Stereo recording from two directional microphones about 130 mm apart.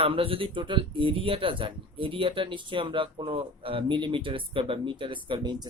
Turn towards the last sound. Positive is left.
turn(degrees=-35)  # may be behind; listen again after turning